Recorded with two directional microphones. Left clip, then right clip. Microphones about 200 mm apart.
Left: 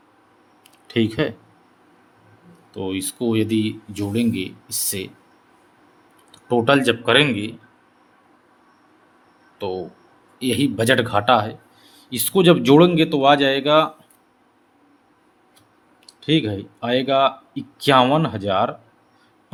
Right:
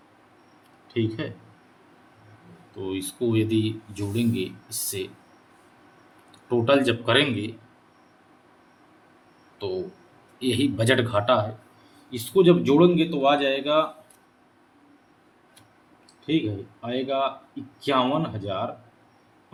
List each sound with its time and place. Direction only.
0.9 s speech: 55° left (ahead or behind)
2.7 s speech: 40° left (ahead or behind)
6.3 s speech: 35° left (ahead or behind)
9.6 s speech: 25° left (ahead or behind)
12.1 s speech: 55° left (ahead or behind)
16.8 s speech: 60° left (ahead or behind)